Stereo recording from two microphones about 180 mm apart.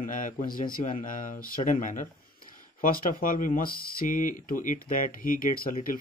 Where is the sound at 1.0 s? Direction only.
50° left (ahead or behind).